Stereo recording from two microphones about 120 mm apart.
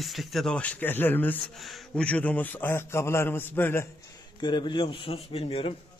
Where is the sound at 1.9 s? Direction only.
10° left (ahead or behind).